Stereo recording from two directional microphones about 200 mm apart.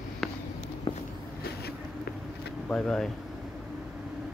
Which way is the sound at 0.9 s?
25° left (ahead or behind).